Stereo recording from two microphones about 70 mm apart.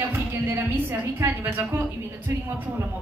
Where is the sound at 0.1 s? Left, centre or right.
Right.